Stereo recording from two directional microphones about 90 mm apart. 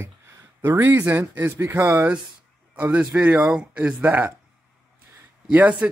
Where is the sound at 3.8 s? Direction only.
25° right (ahead or behind).